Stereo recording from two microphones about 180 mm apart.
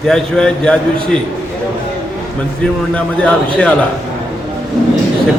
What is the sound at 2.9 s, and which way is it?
Speech, 5° left (ahead or behind).